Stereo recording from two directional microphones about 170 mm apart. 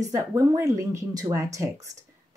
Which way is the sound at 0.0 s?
20° right (ahead or behind).